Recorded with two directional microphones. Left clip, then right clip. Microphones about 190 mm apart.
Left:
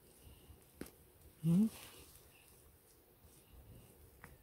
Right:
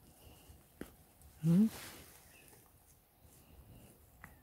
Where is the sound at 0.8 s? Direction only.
Centre (ahead or behind).